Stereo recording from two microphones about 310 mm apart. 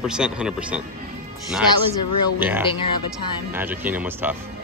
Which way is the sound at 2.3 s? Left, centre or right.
Centre.